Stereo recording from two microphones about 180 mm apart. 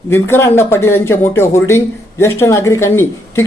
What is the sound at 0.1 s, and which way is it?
Speech, 15° left (ahead or behind).